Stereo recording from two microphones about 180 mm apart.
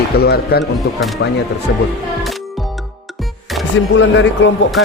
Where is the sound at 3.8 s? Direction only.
90° left.